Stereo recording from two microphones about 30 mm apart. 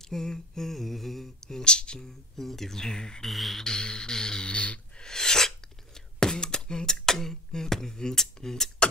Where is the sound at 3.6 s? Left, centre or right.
Left.